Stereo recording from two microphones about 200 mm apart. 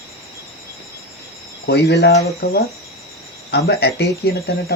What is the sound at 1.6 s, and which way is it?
Speech, 55° left (ahead or behind).